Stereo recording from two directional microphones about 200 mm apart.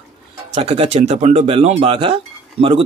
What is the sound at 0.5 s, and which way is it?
Speech, 30° right (ahead or behind).